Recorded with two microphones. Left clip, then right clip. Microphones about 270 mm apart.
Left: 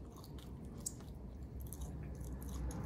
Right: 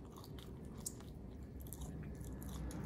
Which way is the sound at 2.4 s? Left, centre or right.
Centre.